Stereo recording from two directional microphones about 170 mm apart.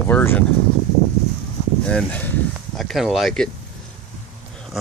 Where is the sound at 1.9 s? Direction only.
5° left (ahead or behind).